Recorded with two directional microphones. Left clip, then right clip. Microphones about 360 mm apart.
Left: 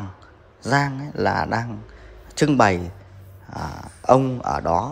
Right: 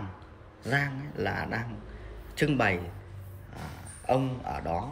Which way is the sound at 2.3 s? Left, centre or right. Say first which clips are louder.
Left 9 dB; centre.